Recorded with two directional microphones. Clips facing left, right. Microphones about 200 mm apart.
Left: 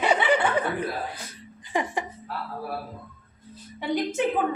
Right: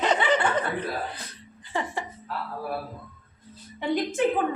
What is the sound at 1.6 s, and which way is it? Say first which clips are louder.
Speech: left 3 dB; 15° left (ahead or behind).